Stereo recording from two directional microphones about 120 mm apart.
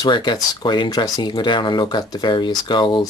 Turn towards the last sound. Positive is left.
turn(degrees=40)  # may be behind; listen again after turning